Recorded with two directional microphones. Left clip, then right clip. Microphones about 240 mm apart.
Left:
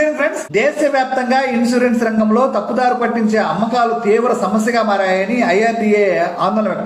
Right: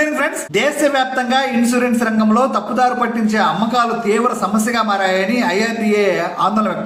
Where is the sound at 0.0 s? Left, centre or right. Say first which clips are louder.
Left 2 dB; centre.